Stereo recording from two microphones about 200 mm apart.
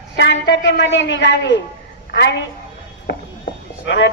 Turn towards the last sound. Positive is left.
turn(degrees=60)  # may be behind; listen again after turning